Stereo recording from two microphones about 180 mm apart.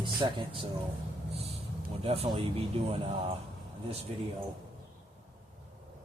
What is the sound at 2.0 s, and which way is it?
Speech, 35° right (ahead or behind).